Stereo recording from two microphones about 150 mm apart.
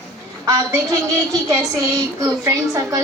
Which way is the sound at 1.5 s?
20° right (ahead or behind).